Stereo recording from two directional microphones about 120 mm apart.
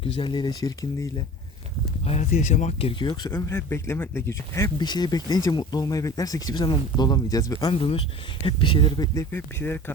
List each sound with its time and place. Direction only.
0.0 s speech: 45° left (ahead or behind); by 1.1 s 25° left (ahead or behind)
2.0 s speech: 65° left (ahead or behind)
3.0 s speech: 40° left (ahead or behind)
3.3 s a man's voice: 20° left (ahead or behind)
4.8 s speech: 35° left (ahead or behind)
7.7 s speech: 50° left (ahead or behind)
9.1 s speech: 20° left (ahead or behind)